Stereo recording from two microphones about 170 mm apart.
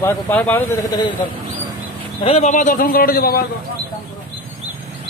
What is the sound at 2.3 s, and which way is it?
A man's voice, 45° left (ahead or behind).